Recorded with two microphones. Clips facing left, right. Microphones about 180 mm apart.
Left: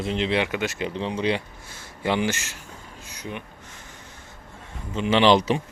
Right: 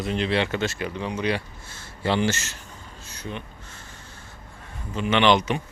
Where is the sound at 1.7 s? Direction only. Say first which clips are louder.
Even; 15° left (ahead or behind).